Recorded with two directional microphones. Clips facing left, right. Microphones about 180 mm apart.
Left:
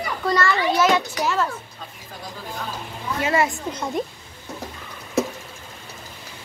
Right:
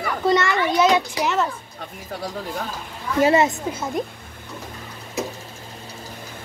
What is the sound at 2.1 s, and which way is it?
Speech, 70° right (ahead or behind).